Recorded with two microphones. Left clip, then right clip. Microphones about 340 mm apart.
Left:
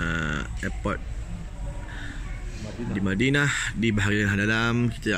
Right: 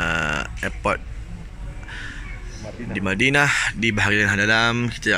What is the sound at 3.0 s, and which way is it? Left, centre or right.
Speech, centre.